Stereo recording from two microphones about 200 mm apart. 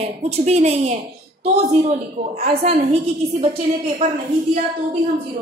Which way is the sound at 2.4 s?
30° right (ahead or behind).